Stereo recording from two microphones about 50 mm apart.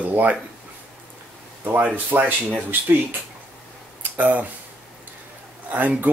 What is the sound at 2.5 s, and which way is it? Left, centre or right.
Speech, right.